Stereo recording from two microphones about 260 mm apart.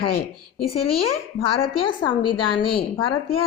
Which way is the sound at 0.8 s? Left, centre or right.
Left.